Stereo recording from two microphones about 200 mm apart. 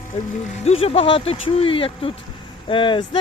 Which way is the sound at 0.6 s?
30° left (ahead or behind).